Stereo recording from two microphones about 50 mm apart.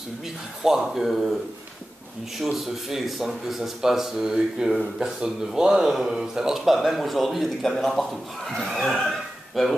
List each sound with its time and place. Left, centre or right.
0.6 s speech: centre